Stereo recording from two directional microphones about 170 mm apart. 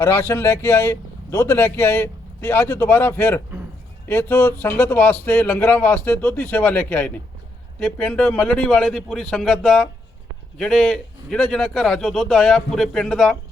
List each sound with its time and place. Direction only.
0.0 s a man's voice: 15° left (ahead or behind)